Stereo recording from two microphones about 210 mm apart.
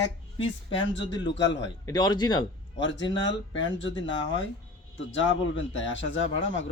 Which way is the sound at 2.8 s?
60° left (ahead or behind).